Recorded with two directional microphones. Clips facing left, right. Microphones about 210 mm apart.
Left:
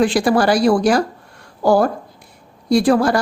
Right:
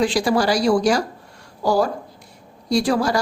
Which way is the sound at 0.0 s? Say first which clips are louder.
Left 4 dB; 55° left (ahead or behind).